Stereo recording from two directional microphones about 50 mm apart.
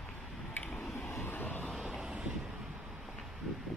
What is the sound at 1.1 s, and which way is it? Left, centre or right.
Vehicle, left.